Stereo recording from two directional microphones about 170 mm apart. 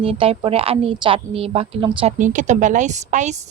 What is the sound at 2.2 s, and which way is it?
A woman's voice, 45° right (ahead or behind).